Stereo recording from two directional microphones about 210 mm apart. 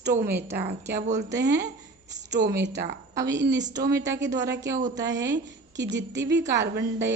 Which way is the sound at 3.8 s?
15° right (ahead or behind).